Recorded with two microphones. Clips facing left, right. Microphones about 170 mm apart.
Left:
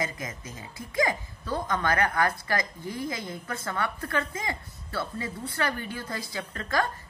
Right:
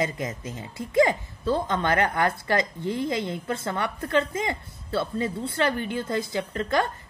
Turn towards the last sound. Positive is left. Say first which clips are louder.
# right 4 dB
turn(degrees=-25)  # may be behind; listen again after turning